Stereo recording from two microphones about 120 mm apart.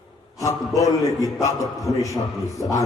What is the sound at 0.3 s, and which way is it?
A man's voice, 30° left (ahead or behind).